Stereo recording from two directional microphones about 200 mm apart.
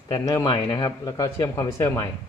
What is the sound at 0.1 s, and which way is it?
Speech, 15° left (ahead or behind).